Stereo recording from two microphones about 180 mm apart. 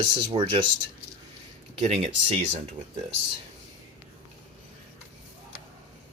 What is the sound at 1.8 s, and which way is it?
Speech, 35° right (ahead or behind).